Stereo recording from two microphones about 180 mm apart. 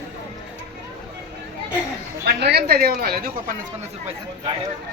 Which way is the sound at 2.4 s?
65° right (ahead or behind).